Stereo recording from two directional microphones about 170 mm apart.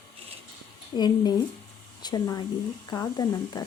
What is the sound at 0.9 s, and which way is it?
Speech, 25° left (ahead or behind).